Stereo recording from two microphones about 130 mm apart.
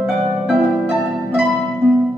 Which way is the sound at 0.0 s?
5° right (ahead or behind).